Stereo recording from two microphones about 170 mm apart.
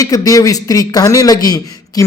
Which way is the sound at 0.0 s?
20° left (ahead or behind).